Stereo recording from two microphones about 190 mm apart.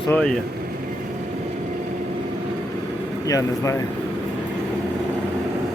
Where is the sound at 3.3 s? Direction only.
15° left (ahead or behind).